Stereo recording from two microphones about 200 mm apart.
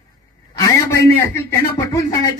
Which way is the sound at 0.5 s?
15° left (ahead or behind).